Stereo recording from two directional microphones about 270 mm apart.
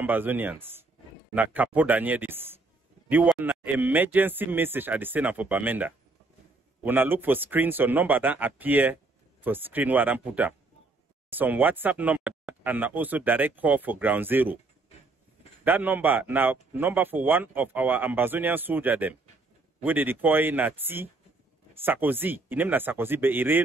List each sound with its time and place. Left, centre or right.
0.0 s speech: centre
15.6 s speech: centre